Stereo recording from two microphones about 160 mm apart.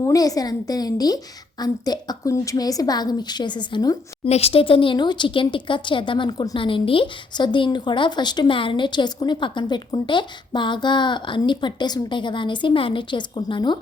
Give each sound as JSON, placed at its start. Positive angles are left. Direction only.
{"t": 0.1, "sound": "speech", "side_deg": 20}
{"t": 4.3, "sound": "speech", "side_deg": 40}